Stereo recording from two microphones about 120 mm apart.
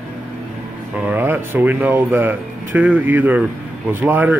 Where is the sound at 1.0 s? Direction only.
15° right (ahead or behind).